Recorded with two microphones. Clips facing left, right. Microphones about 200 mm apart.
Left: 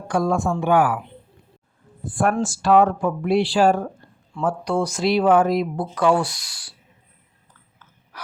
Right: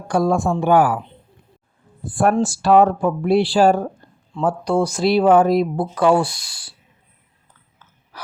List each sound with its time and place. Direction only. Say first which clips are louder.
0.1 s speech: right 3 dB; 35° right (ahead or behind)
2.0 s speech: right 4 dB; 35° right (ahead or behind)
8.1 s gasp: right 2 dB; 30° right (ahead or behind)